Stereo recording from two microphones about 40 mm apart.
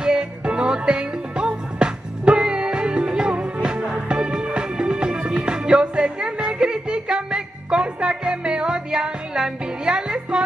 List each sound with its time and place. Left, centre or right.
0.0 s music: right